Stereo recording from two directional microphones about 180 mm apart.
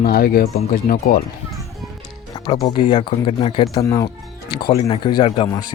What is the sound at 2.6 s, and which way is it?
Speech, 25° left (ahead or behind).